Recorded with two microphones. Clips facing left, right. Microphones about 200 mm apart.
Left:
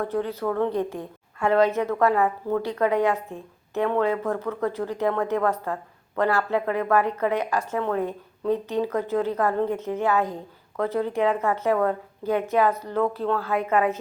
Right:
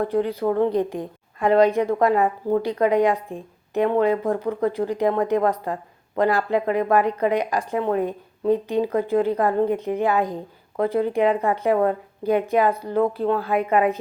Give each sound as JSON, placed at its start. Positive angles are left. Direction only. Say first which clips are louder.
{"t": 0.0, "sound": "speech", "louder": "right 4 dB", "side_deg": -15}
{"t": 0.4, "sound": "speech", "louder": "right 4 dB", "side_deg": -25}
{"t": 0.7, "sound": "speech", "louder": "right 4 dB", "side_deg": -15}